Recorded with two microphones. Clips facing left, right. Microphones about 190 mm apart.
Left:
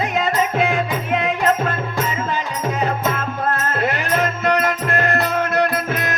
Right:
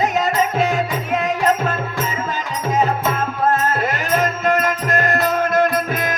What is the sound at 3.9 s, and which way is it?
Music, 45° right (ahead or behind).